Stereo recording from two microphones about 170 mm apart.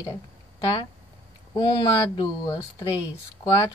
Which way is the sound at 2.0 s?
25° left (ahead or behind).